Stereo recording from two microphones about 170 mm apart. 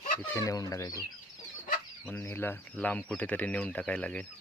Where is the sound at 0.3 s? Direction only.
20° left (ahead or behind).